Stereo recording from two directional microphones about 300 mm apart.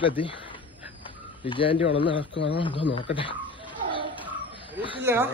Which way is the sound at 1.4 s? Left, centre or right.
Centre.